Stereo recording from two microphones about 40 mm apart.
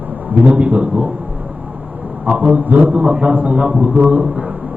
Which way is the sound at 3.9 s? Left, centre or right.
Right.